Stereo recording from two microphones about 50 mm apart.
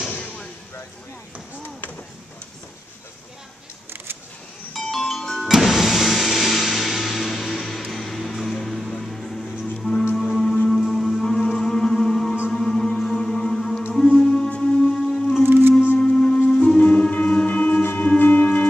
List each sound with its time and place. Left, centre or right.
4.7 s music: centre
5.5 s music: centre
9.8 s music: centre
14.5 s whale vocalization: centre
15.4 s music: right
16.0 s music: centre